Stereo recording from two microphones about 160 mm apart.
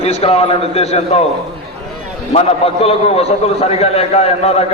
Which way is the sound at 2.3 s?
40° left (ahead or behind).